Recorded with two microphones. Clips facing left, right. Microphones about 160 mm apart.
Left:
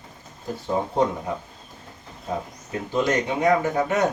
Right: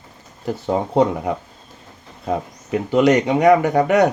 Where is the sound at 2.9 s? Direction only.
80° right.